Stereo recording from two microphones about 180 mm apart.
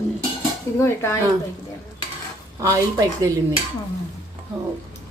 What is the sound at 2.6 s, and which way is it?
Speech, 20° right (ahead or behind).